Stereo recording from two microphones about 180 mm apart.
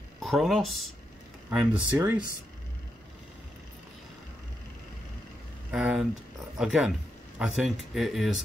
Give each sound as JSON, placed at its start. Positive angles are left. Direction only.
{"t": 0.2, "sound": "speech", "side_deg": 0}
{"t": 5.7, "sound": "vehicle", "side_deg": -5}
{"t": 6.6, "sound": "speech", "side_deg": 0}